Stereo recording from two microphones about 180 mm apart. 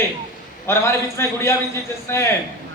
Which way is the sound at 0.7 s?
15° left (ahead or behind).